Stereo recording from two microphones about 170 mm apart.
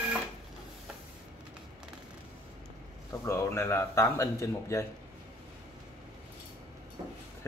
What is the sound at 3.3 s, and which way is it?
Speech, 15° left (ahead or behind).